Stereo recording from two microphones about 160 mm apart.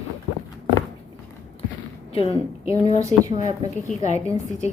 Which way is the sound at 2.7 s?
40° left (ahead or behind).